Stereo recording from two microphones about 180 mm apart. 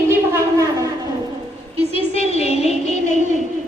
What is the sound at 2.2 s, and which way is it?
Music, 35° left (ahead or behind).